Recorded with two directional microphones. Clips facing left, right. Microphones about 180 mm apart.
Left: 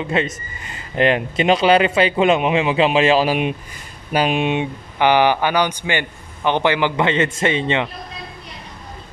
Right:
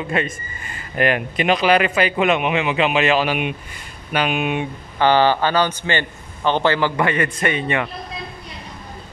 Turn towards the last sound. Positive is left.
turn(degrees=25)  # may be behind; listen again after turning